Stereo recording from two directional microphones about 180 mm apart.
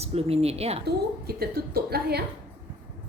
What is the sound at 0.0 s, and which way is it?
Speech, 35° right (ahead or behind).